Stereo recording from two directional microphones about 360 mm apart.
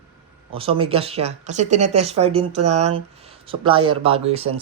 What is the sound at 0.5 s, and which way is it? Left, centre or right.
Speech, centre.